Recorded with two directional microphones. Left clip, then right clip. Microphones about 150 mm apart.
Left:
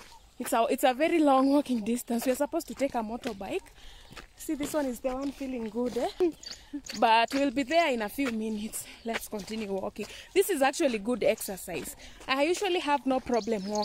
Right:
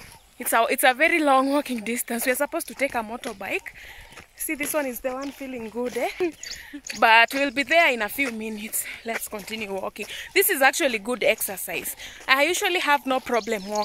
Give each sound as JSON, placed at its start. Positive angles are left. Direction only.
{"t": 0.5, "sound": "speech", "side_deg": 5}
{"t": 4.6, "sound": "speech", "side_deg": -15}
{"t": 6.9, "sound": "speech", "side_deg": 0}